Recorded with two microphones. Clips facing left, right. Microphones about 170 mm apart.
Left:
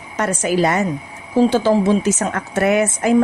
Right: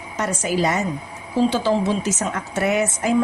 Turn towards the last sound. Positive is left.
turn(degrees=55)  # may be behind; listen again after turning